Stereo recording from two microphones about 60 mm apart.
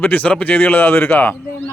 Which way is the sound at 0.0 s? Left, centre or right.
Left.